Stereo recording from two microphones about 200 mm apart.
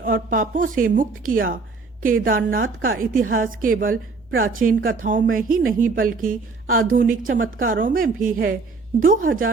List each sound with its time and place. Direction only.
0.0 s a woman's voice: 45° right (ahead or behind)